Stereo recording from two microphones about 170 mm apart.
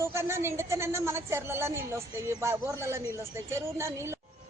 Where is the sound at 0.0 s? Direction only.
15° right (ahead or behind).